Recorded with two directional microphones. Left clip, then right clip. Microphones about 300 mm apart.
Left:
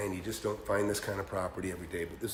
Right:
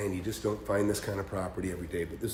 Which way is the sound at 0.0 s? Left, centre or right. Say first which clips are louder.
Right 2 dB; centre.